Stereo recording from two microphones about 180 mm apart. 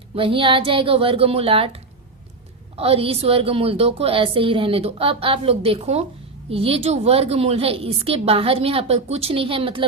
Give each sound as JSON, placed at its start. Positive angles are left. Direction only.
{"t": 0.2, "sound": "a woman's voice", "side_deg": -30}